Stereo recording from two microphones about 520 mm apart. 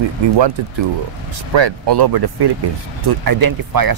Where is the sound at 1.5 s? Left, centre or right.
Right.